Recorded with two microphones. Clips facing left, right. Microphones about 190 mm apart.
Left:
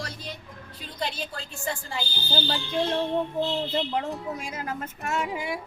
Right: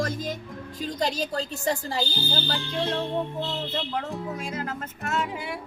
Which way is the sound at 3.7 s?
10° left (ahead or behind).